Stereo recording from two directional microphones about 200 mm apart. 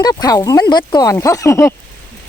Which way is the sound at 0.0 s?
20° left (ahead or behind).